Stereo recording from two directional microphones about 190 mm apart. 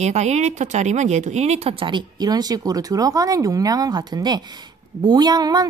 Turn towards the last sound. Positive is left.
turn(degrees=-20)  # may be behind; listen again after turning